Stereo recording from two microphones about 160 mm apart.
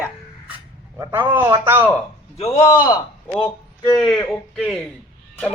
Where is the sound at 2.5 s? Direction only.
20° left (ahead or behind).